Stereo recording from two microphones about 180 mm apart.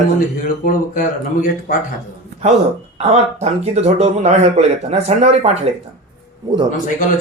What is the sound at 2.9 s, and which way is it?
Speech, 35° right (ahead or behind).